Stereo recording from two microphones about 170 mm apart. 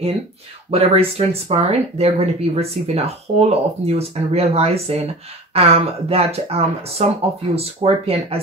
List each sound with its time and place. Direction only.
0.7 s speech: 35° right (ahead or behind)